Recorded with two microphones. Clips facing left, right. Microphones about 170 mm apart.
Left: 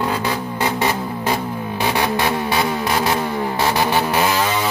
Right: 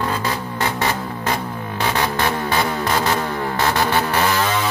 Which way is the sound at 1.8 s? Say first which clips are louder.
Left 1 dB; 15° left (ahead or behind).